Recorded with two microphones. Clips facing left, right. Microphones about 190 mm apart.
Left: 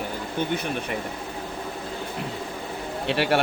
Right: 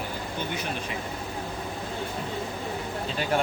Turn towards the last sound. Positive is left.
turn(degrees=75)  # may be behind; listen again after turning